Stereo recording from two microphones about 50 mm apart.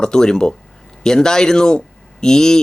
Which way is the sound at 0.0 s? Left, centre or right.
Centre.